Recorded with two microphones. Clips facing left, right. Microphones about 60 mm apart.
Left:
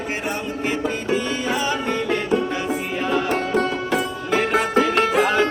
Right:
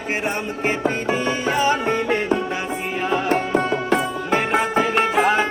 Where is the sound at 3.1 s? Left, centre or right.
Centre.